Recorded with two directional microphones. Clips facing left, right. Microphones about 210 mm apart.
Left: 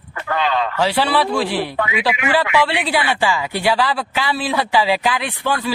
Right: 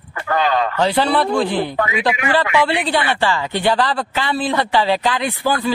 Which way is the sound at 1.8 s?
45° right (ahead or behind).